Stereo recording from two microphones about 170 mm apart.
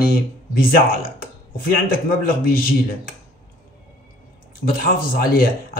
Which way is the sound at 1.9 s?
55° left (ahead or behind).